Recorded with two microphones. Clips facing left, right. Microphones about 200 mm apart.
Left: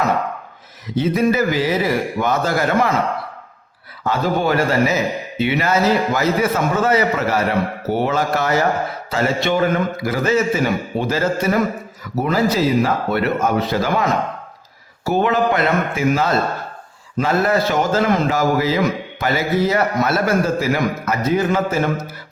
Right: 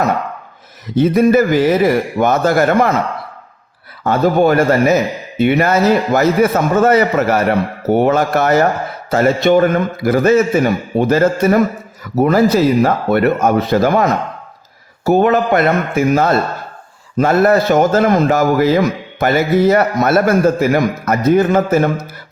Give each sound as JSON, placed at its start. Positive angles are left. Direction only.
{"t": 0.9, "sound": "a man's voice", "side_deg": -55}
{"t": 4.0, "sound": "a man's voice", "side_deg": -55}